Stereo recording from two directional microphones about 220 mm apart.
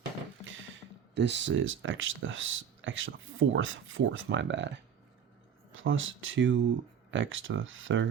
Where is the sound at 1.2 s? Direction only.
55° right (ahead or behind).